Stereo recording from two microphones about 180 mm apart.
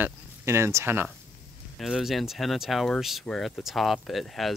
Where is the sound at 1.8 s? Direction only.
Centre (ahead or behind).